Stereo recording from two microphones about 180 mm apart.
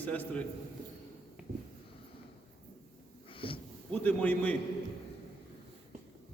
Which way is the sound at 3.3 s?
30° left (ahead or behind).